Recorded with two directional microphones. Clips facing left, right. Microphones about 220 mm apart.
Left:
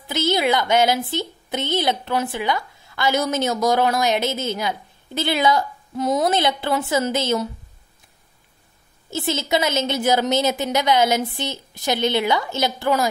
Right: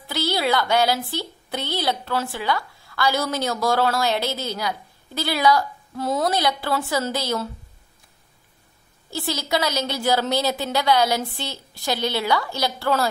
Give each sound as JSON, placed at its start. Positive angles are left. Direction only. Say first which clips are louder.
{"t": 0.0, "sound": "speech", "louder": "left 3 dB", "side_deg": 20}
{"t": 9.1, "sound": "speech", "louder": "left 3 dB", "side_deg": 20}